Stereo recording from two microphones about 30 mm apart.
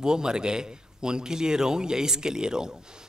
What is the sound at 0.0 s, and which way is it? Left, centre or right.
A man's voice, right.